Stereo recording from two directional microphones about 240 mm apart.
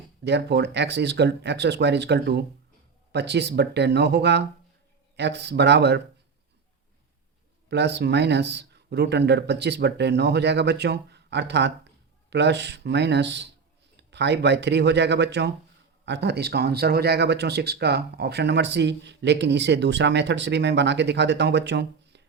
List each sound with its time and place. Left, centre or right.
0.3 s speech: right
7.7 s speech: right